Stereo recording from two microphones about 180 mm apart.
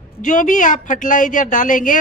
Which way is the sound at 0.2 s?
45° left (ahead or behind).